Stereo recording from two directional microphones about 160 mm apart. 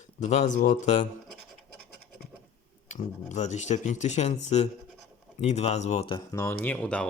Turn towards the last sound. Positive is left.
turn(degrees=5)  # may be behind; listen again after turning